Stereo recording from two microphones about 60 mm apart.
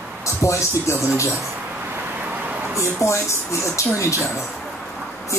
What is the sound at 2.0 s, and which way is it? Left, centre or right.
Vehicle, right.